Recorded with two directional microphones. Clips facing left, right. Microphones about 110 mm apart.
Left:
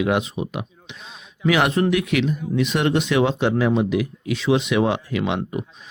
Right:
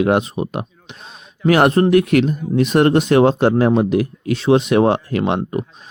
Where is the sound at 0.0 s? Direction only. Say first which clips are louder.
Right 5 dB; 45° right (ahead or behind).